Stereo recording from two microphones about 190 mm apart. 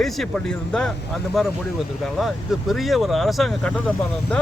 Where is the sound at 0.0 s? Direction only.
Centre (ahead or behind).